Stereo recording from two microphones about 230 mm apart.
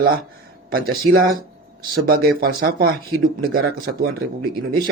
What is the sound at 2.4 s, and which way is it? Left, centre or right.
A man's voice, right.